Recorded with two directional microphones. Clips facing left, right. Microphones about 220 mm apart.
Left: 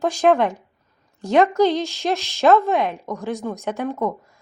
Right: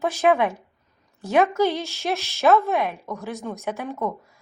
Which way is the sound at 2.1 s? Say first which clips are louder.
Left 3 dB; 15° left (ahead or behind).